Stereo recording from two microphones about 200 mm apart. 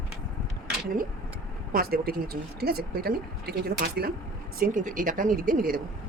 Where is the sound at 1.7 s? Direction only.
50° right (ahead or behind).